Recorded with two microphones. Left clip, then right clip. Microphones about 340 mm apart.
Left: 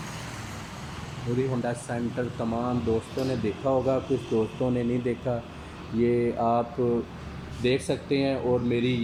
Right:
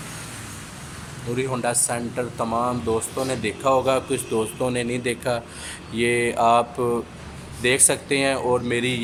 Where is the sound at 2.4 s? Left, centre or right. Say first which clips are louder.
Right 7 dB; right.